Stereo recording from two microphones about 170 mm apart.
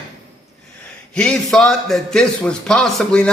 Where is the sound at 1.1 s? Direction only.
5° left (ahead or behind).